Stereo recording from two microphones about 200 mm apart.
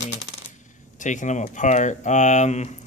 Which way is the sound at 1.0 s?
35° left (ahead or behind).